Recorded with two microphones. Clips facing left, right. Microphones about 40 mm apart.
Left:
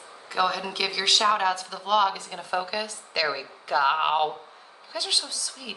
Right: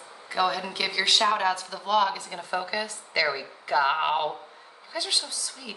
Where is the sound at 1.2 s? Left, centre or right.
Centre.